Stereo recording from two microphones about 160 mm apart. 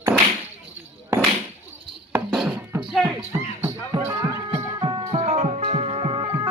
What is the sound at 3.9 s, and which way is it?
Music, 25° right (ahead or behind).